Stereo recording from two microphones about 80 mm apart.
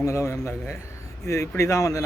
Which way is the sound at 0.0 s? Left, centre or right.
Left.